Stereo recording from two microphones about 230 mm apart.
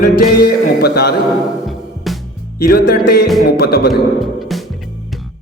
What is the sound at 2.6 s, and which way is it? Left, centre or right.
A man's voice, left.